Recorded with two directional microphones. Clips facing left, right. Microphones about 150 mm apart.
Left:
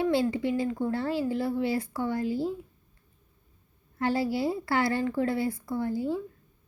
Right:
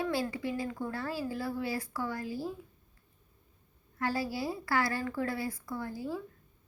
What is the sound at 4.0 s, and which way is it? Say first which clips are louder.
A woman's voice: left 6 dB; 25° left (ahead or behind).